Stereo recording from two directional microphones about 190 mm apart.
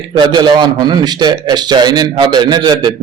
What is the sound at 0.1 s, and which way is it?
A man's voice, 25° right (ahead or behind).